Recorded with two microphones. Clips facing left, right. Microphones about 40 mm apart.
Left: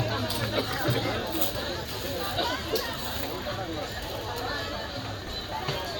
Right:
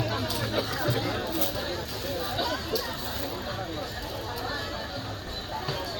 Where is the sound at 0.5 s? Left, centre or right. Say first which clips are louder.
Even; centre.